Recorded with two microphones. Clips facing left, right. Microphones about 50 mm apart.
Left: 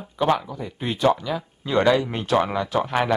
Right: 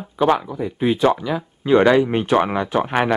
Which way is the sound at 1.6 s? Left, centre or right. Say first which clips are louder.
Right 5 dB; right.